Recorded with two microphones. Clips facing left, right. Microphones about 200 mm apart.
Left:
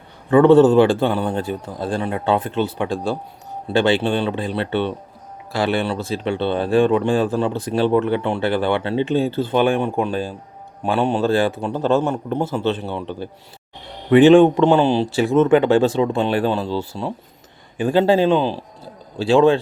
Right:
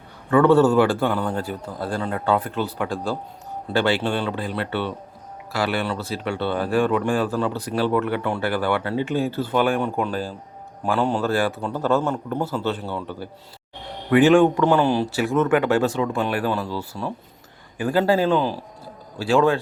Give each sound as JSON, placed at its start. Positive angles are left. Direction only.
{"t": 0.3, "sound": "speech", "side_deg": 20}